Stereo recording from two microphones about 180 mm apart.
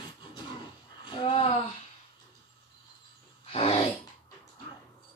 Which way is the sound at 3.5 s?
30° left (ahead or behind).